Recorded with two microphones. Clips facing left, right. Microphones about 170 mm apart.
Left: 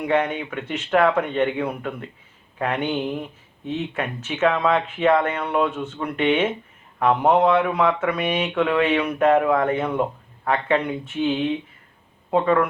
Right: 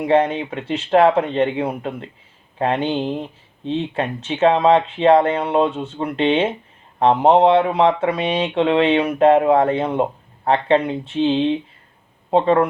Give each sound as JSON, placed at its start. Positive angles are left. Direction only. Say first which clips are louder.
{"t": 0.0, "sound": "speech", "louder": "right 5 dB", "side_deg": -30}